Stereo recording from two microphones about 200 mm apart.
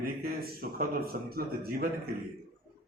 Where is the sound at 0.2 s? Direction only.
50° right (ahead or behind).